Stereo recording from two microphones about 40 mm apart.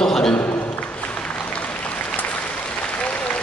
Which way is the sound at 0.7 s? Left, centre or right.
Left.